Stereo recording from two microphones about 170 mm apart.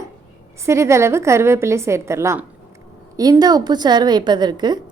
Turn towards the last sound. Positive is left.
turn(degrees=-25)  # may be behind; listen again after turning